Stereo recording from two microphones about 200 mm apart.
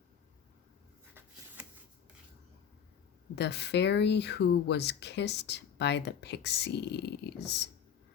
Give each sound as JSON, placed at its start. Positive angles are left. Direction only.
{"t": 3.3, "sound": "speech", "side_deg": 55}